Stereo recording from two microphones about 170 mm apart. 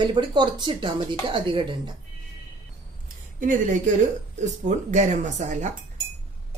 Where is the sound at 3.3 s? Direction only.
50° right (ahead or behind).